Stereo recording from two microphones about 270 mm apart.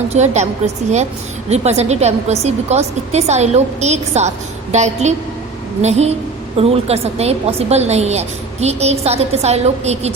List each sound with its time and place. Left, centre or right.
0.1 s a woman's voice: right
1.5 s a woman's voice: right